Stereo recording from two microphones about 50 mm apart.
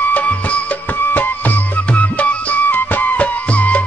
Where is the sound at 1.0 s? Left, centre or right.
Left.